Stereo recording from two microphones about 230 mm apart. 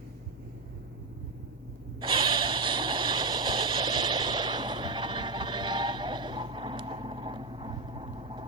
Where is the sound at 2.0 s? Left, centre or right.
Right.